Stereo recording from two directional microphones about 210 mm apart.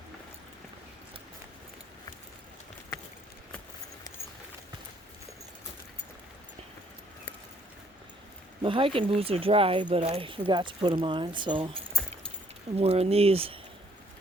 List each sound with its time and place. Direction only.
8.6 s speech: 25° right (ahead or behind)